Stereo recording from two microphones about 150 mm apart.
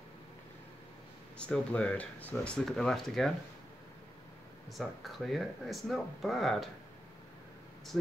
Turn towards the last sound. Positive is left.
turn(degrees=0)  # may be behind; listen again after turning